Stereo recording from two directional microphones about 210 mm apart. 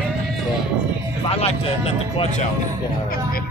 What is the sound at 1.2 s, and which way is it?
Speech, 30° left (ahead or behind).